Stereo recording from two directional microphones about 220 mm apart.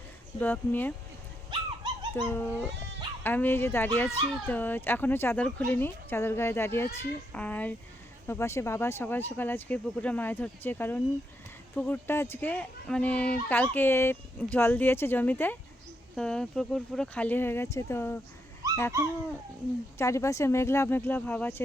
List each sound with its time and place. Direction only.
0.3 s speech: 10° left (ahead or behind)
1.5 s dog: 20° right (ahead or behind)
2.1 s speech: 10° left (ahead or behind)
18.6 s owl: 15° right (ahead or behind)
20.0 s speech: 15° left (ahead or behind)